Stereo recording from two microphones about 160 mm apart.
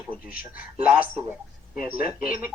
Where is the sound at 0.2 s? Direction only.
10° right (ahead or behind).